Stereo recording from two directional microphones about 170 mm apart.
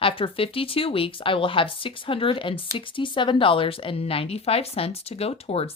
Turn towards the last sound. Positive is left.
turn(degrees=35)  # may be behind; listen again after turning